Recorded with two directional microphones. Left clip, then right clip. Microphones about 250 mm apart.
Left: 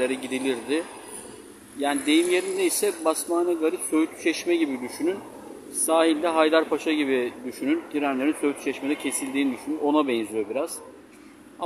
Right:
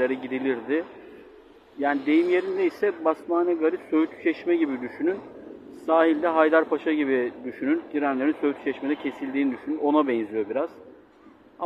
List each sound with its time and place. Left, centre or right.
0.0 s a man's voice: left